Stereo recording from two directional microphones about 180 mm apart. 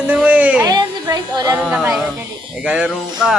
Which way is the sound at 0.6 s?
25° right (ahead or behind).